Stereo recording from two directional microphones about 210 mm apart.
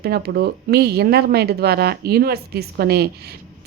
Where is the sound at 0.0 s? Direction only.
50° right (ahead or behind).